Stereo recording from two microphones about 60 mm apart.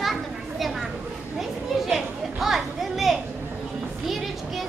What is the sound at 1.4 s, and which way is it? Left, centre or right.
Children playing, centre.